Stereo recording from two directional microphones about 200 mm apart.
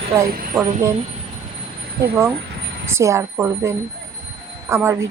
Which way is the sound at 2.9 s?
15° right (ahead or behind).